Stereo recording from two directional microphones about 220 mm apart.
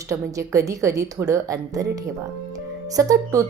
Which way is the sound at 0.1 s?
15° right (ahead or behind).